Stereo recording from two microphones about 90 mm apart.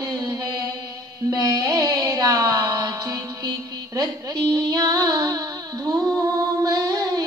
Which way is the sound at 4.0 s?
45° right (ahead or behind).